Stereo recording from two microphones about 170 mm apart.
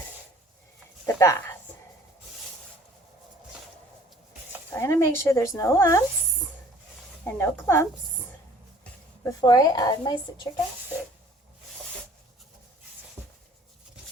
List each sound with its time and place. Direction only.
1.0 s speech: 15° left (ahead or behind)
4.7 s speech: 15° left (ahead or behind)
7.3 s speech: 15° left (ahead or behind)
9.4 s speech: 25° left (ahead or behind)